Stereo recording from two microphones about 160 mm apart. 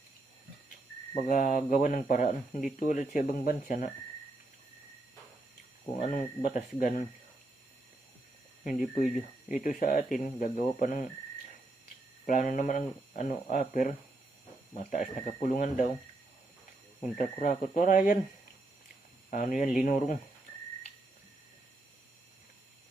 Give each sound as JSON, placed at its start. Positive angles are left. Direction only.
{"t": 1.3, "sound": "speech", "side_deg": 55}
{"t": 6.0, "sound": "speech", "side_deg": 55}
{"t": 9.5, "sound": "speech", "side_deg": 55}
{"t": 12.2, "sound": "speech", "side_deg": 55}
{"t": 17.0, "sound": "speech", "side_deg": 55}
{"t": 19.3, "sound": "speech", "side_deg": 55}